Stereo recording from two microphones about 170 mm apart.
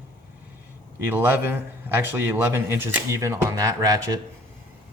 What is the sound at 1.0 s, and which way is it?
A man's voice, 10° right (ahead or behind).